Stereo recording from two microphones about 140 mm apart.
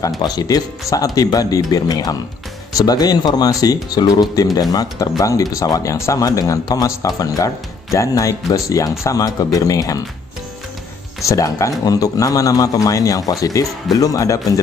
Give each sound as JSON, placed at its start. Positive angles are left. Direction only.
{"t": 0.2, "sound": "speech", "side_deg": 30}
{"t": 11.2, "sound": "speech", "side_deg": 20}